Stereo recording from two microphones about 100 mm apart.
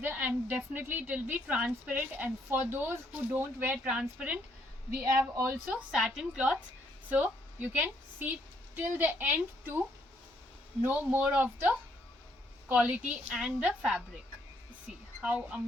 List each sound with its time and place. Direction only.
0.0 s a woman's voice: 15° right (ahead or behind)
5.4 s a woman's voice: 20° right (ahead or behind)
10.8 s a woman's voice: 15° right (ahead or behind)
15.2 s a woman's voice: 10° right (ahead or behind)